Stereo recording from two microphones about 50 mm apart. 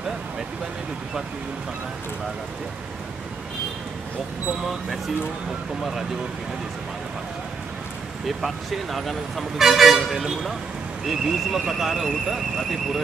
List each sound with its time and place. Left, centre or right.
4.6 s speech: centre
8.3 s speech: centre